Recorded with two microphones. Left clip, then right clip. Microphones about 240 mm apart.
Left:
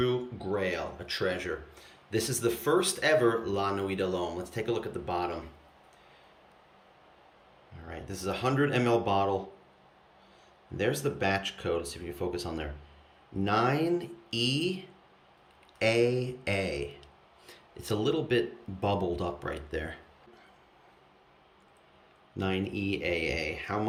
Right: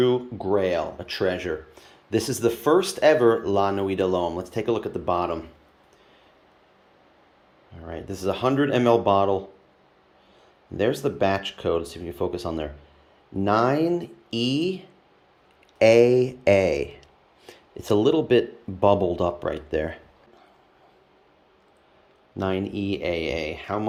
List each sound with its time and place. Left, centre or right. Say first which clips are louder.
0.0 s speech: right 8 dB; centre
7.9 s speech: right 8 dB; centre
10.8 s speech: right 7 dB; centre
22.4 s speech: right 6 dB; centre